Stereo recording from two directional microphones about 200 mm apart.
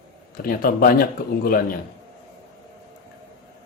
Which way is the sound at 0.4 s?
45° left (ahead or behind).